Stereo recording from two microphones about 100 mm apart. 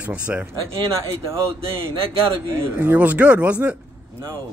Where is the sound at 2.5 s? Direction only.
25° right (ahead or behind).